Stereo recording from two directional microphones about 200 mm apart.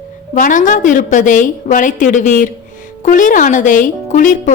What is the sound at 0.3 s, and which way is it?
A woman's voice, 40° left (ahead or behind).